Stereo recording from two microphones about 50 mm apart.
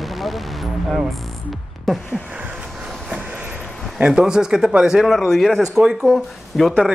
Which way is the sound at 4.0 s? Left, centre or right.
Centre.